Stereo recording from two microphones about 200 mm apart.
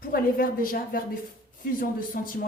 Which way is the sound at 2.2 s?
45° left (ahead or behind).